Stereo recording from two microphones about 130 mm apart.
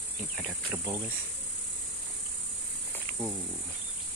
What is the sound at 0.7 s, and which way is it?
Speech, 30° right (ahead or behind).